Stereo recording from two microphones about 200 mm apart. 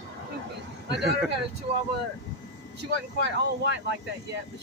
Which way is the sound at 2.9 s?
60° right (ahead or behind).